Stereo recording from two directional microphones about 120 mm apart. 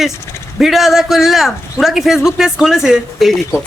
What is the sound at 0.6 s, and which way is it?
Speech, centre (ahead or behind).